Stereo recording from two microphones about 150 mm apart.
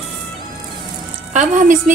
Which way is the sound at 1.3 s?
55° right (ahead or behind).